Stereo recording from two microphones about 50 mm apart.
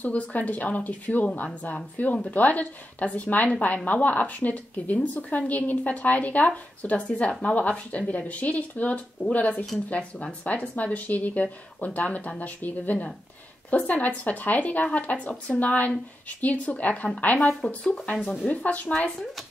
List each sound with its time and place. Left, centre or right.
0.0 s a woman's voice: left